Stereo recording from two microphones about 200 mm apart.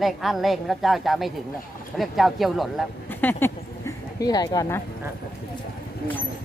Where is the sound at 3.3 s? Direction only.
10° left (ahead or behind).